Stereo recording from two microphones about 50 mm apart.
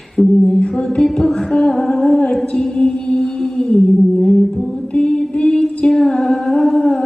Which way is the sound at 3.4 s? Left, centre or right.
Centre.